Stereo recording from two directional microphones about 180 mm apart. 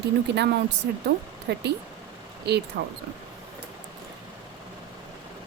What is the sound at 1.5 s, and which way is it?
Speech, 70° right (ahead or behind).